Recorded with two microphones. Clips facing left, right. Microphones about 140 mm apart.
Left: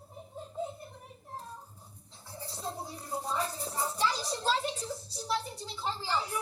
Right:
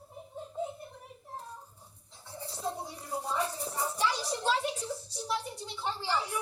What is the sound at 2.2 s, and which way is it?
Turkey, 30° left (ahead or behind).